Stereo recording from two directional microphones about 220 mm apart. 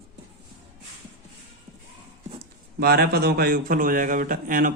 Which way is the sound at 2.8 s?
45° right (ahead or behind).